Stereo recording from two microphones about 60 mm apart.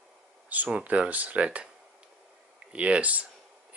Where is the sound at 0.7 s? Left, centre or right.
Right.